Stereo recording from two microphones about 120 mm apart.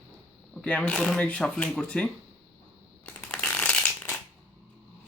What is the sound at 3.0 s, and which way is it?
Shuffling cards, 15° left (ahead or behind).